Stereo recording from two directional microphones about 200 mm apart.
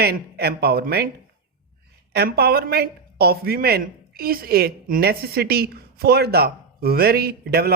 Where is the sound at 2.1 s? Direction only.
50° right (ahead or behind).